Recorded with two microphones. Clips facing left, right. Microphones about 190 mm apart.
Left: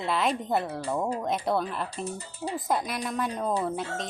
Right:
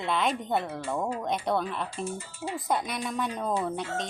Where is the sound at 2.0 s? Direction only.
40° left (ahead or behind).